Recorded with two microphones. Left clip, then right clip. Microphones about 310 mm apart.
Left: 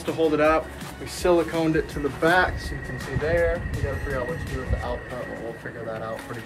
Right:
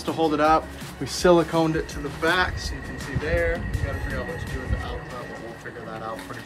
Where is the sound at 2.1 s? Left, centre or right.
Centre.